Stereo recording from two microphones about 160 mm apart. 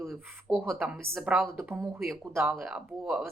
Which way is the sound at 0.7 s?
Centre (ahead or behind).